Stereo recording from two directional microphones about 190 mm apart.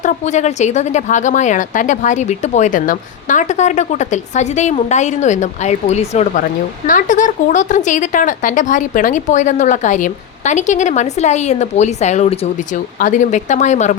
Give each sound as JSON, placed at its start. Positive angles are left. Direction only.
{"t": 0.0, "sound": "a woman's voice", "side_deg": 40}